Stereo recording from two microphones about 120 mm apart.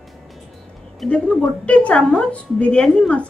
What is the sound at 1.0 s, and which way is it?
A woman's voice, 10° left (ahead or behind).